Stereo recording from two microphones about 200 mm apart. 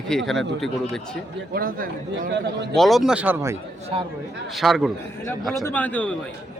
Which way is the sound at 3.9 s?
30° right (ahead or behind).